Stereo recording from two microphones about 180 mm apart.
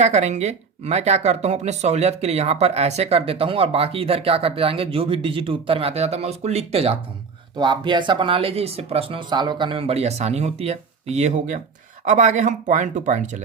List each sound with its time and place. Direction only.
0.0 s speech: 40° right (ahead or behind)